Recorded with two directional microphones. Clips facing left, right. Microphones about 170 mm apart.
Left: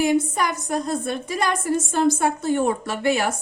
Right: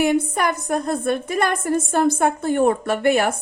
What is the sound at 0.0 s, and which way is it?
A woman's voice, 60° right (ahead or behind).